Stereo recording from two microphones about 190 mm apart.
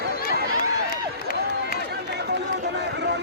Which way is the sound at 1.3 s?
50° left (ahead or behind).